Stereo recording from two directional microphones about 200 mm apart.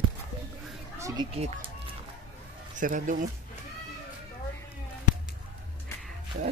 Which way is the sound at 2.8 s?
40° right (ahead or behind).